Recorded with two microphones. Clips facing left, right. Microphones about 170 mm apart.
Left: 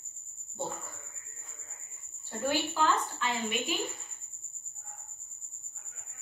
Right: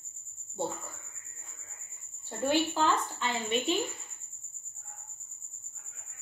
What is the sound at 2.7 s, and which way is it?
A woman's voice, 25° right (ahead or behind).